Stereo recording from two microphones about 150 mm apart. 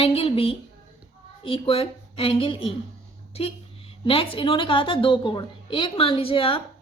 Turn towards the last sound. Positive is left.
turn(degrees=40)  # may be behind; listen again after turning